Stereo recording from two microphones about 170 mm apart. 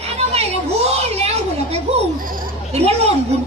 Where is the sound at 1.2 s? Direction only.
35° right (ahead or behind).